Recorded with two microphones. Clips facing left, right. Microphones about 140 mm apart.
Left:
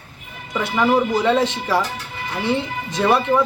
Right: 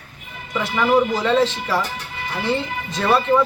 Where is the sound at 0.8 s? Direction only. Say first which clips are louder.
Even; 15° left (ahead or behind).